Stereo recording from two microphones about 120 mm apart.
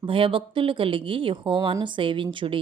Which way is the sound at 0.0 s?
45° right (ahead or behind).